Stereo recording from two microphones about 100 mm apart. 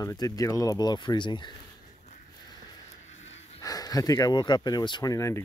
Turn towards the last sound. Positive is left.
turn(degrees=35)  # may be behind; listen again after turning